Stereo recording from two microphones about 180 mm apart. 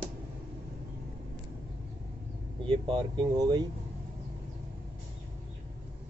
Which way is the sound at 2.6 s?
30° right (ahead or behind).